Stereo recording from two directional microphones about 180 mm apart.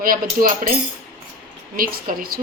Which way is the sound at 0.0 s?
50° right (ahead or behind).